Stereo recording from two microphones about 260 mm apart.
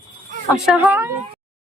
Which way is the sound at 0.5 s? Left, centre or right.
Centre.